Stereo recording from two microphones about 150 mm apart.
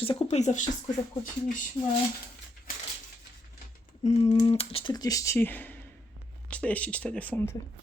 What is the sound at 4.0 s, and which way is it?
Speech, 50° left (ahead or behind).